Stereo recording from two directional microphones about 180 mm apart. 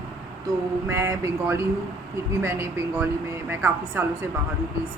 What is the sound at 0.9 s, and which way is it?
Speech, 15° right (ahead or behind).